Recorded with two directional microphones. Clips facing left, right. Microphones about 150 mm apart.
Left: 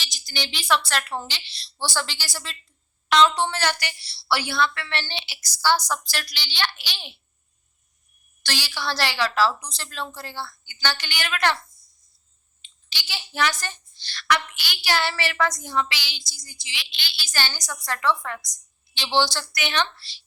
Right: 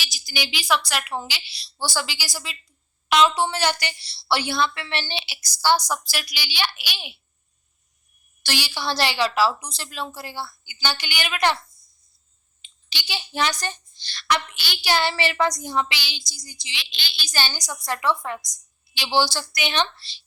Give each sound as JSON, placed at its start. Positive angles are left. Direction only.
{"t": 0.0, "sound": "a sound", "side_deg": -5}
{"t": 0.9, "sound": "a woman's voice", "side_deg": -5}
{"t": 8.4, "sound": "speech", "side_deg": -15}
{"t": 12.6, "sound": "speech", "side_deg": -15}